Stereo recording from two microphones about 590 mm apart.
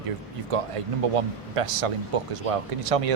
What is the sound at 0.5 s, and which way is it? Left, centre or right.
Speech, right.